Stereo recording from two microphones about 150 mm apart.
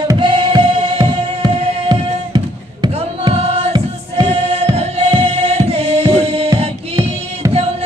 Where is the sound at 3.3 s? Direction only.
40° right (ahead or behind).